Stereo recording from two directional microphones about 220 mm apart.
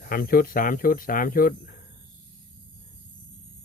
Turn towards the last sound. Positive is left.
turn(degrees=40)  # may be behind; listen again after turning